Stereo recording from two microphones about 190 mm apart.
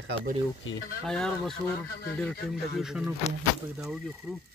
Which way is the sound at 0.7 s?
80° left.